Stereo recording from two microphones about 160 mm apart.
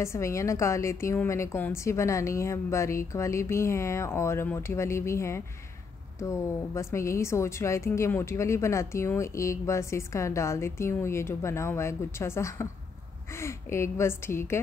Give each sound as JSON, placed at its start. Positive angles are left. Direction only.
{"t": 0.0, "sound": "a woman's voice", "side_deg": 15}
{"t": 6.7, "sound": "a woman's voice", "side_deg": 20}